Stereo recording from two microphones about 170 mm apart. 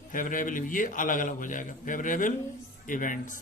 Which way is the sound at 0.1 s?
50° left (ahead or behind).